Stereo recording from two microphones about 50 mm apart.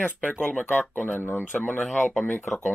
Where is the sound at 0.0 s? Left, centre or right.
Left.